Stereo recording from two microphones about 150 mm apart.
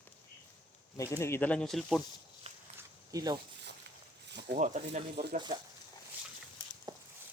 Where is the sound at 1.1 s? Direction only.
15° left (ahead or behind).